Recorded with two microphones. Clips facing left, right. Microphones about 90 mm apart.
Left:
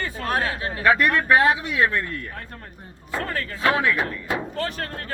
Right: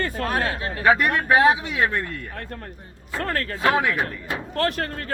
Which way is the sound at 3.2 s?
60° right (ahead or behind).